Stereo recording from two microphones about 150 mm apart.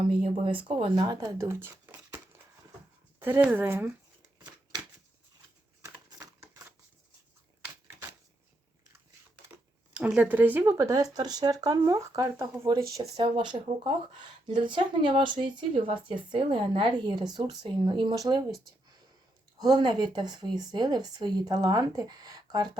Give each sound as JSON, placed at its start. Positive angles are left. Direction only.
{"t": 0.0, "sound": "speech", "side_deg": -40}
{"t": 1.4, "sound": "speech", "side_deg": -15}
{"t": 6.4, "sound": "a sound", "side_deg": -20}
{"t": 9.9, "sound": "speech", "side_deg": -10}